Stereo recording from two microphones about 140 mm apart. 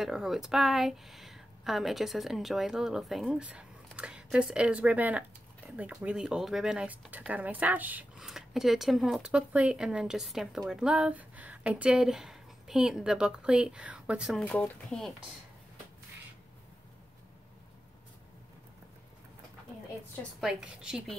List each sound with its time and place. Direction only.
0.0 s speech: 5° right (ahead or behind)
14.4 s speech: 10° left (ahead or behind)
20.3 s speech: 5° right (ahead or behind)